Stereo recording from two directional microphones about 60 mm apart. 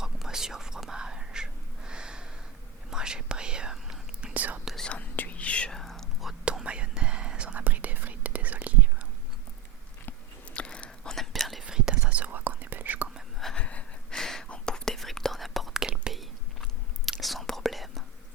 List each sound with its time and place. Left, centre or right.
0.0 s whispering: centre
4.4 s whispering: right
4.8 s whispering: left
5.7 s whispering: centre
6.4 s whispering: centre
10.5 s whispering: centre
11.6 s whispering: centre; by 13.1 s right
13.6 s gasp: centre
14.2 s whispering: centre
17.1 s whispering: centre